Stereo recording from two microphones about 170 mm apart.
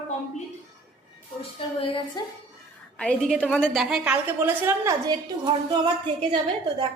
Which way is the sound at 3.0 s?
5° left (ahead or behind).